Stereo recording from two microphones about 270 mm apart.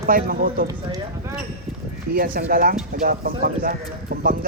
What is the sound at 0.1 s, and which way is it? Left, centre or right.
Speech, right.